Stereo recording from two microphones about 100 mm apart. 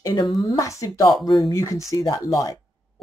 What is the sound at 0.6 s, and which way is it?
Speech, 30° left (ahead or behind).